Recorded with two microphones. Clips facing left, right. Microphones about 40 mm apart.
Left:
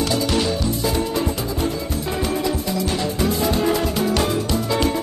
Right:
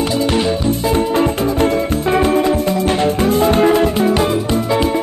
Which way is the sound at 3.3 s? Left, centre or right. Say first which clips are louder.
Right 7 dB; right.